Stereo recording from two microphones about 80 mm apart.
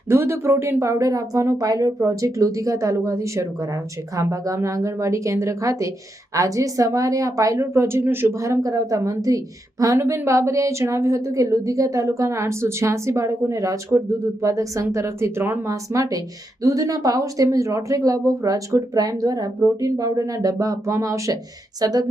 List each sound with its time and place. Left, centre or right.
0.1 s a woman's voice: right
15.6 s a woman's voice: right